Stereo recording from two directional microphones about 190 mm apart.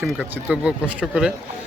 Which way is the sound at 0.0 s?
5° right (ahead or behind).